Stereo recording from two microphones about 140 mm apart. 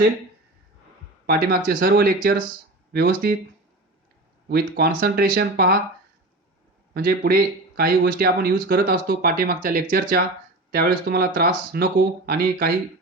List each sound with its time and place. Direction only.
1.3 s speech: 90° right
4.5 s speech: 90° right
6.9 s speech: 90° right